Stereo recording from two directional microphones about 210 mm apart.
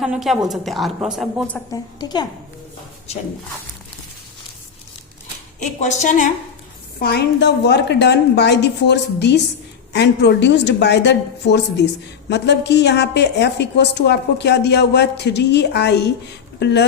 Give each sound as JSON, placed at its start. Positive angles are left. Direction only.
{"t": 0.0, "sound": "speech", "side_deg": 0}
{"t": 2.0, "sound": "a woman's voice", "side_deg": 20}
{"t": 3.1, "sound": "a woman's voice", "side_deg": 30}
{"t": 5.5, "sound": "a woman's voice", "side_deg": 35}
{"t": 7.0, "sound": "a woman's voice", "side_deg": 50}